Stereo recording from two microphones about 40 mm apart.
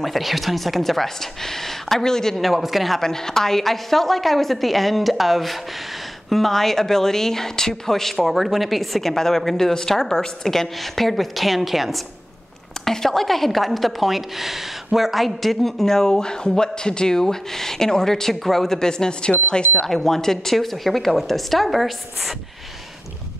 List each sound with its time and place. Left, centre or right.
0.0 s speech: centre
2.3 s a woman's voice: centre
3.0 s a woman's voice: centre
12.8 s speech: centre
18.8 s speech: centre
19.9 s a woman's voice: centre